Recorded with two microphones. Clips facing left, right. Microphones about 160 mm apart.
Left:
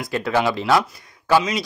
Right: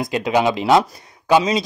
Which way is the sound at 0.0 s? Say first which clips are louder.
Right 3 dB; 20° right (ahead or behind).